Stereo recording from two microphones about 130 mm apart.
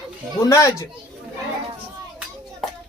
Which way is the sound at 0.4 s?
25° left (ahead or behind).